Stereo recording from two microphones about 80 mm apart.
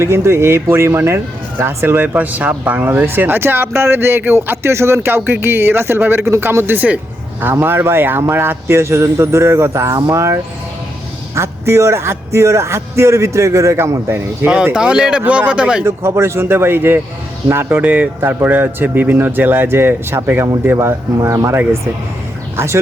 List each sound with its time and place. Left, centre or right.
0.0 s speech: right
2.1 s speech: centre; by 10.3 s right
11.3 s speech: right
14.5 s speech: centre
15.8 s speech: right
17.7 s speech: centre
20.7 s speech: right
22.5 s speech: right